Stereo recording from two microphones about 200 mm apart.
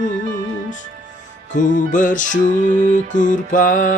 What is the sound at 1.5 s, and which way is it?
Music, 40° left (ahead or behind).